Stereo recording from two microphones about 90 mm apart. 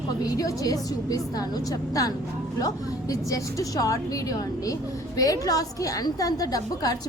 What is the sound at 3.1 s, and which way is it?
A woman's voice, 40° left (ahead or behind).